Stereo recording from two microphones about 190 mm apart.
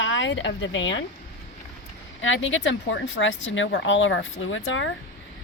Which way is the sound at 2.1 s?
85° left.